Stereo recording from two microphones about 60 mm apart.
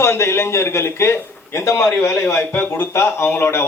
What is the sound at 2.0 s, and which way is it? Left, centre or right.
A man's voice, left.